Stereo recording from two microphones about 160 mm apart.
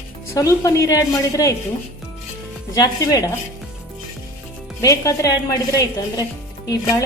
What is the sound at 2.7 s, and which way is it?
Speech, 25° left (ahead or behind).